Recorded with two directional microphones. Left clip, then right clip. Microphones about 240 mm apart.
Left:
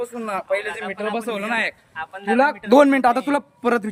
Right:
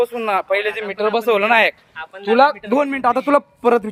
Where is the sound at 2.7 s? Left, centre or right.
Centre.